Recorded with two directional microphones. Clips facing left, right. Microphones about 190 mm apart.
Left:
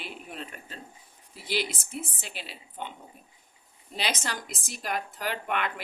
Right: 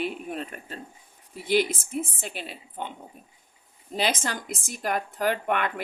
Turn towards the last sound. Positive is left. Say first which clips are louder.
# right 6 dB
turn(degrees=-50)  # may be behind; listen again after turning